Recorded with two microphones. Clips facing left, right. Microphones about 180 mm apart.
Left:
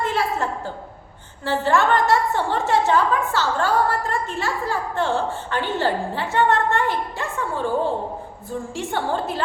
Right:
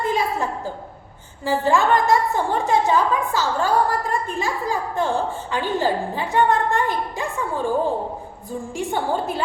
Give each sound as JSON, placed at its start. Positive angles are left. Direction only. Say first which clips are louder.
{"t": 0.1, "sound": "a sound", "louder": "right 1 dB", "side_deg": -15}
{"t": 1.5, "sound": "a woman's voice", "louder": "right 1 dB", "side_deg": -15}
{"t": 8.7, "sound": "a woman's voice", "louder": "right 2 dB", "side_deg": -15}